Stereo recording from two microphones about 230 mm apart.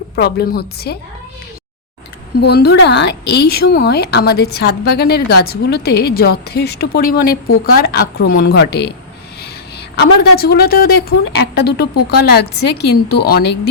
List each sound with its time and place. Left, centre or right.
0.2 s a woman's voice: left
2.4 s a woman's voice: left
10.0 s a woman's voice: left